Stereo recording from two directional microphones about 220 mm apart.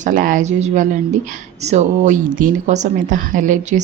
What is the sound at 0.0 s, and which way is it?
A woman's voice, 35° right (ahead or behind).